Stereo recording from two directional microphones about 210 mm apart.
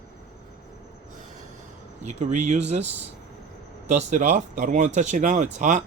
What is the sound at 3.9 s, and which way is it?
Speech, 35° right (ahead or behind).